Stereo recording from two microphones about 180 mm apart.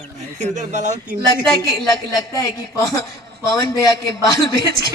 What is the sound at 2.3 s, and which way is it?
A man's voice, 20° left (ahead or behind).